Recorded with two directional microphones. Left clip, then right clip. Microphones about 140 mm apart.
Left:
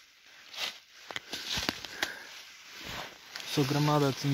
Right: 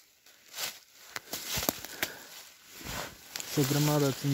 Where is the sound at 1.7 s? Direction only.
90° right.